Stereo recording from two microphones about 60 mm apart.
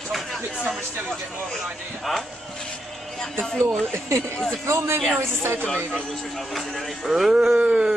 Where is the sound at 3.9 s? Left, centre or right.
Right.